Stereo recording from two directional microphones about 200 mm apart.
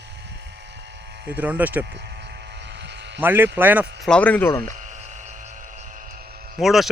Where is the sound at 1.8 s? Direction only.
60° right (ahead or behind).